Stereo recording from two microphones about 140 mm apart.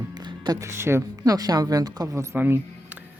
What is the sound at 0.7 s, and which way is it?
Speech, 20° right (ahead or behind).